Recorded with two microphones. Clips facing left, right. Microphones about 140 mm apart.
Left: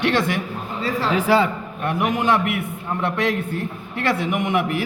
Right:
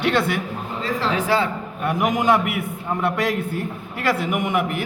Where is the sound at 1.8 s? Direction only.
5° right (ahead or behind).